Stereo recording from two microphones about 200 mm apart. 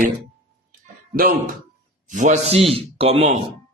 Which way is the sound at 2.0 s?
40° right (ahead or behind).